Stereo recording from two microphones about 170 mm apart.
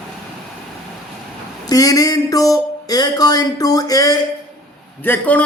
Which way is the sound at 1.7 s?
20° left (ahead or behind).